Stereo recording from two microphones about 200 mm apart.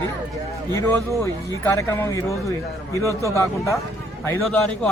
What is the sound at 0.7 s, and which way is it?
A man's voice, 15° left (ahead or behind).